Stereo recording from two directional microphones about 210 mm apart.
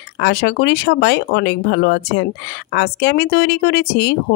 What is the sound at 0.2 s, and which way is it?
Speech, 50° left (ahead or behind).